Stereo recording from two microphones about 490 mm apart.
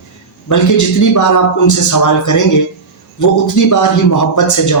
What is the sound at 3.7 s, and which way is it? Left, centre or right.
Speech, left.